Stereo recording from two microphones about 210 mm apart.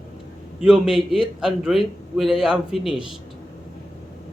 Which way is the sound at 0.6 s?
5° right (ahead or behind).